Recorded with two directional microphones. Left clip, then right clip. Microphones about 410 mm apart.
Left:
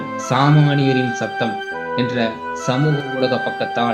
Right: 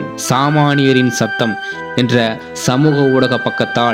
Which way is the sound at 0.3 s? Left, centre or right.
Right.